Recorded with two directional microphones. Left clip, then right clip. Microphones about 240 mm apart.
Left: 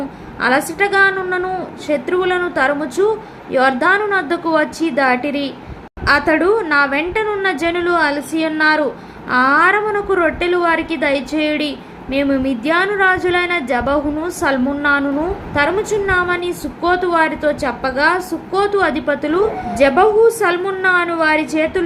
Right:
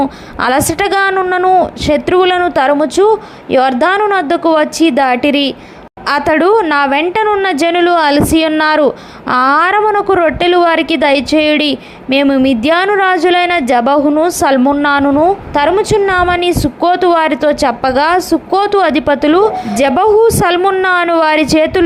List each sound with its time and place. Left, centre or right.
0.3 s a woman's voice: right